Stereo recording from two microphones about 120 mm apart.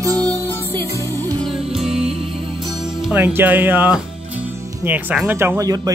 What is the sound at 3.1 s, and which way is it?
Speech, 15° right (ahead or behind).